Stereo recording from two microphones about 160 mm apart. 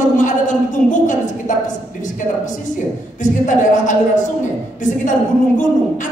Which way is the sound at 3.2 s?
50° left (ahead or behind).